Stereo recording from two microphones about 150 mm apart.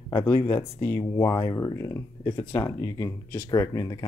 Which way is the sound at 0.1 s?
25° left (ahead or behind).